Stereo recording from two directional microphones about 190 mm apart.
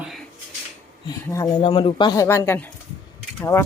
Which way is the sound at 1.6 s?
25° left (ahead or behind).